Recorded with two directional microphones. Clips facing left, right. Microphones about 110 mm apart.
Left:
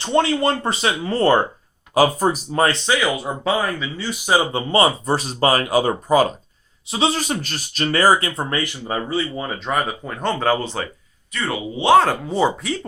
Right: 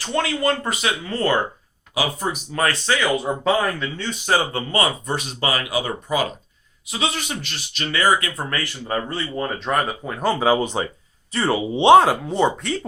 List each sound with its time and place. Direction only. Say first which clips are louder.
0.0 s speech: left 4 dB; 25° left (ahead or behind)
2.6 s speech: right 1 dB; 20° left (ahead or behind)
3.0 s speech: right 1 dB; centre (ahead or behind); by 6.2 s 40° left (ahead or behind)
6.8 s speech: left 5 dB; 30° left (ahead or behind)
8.9 s speech: left 1 dB; 5° left (ahead or behind); by 10.8 s 15° right (ahead or behind)
11.3 s speech: right 4 dB; 30° right (ahead or behind)
12.3 s speech: even; 5° left (ahead or behind)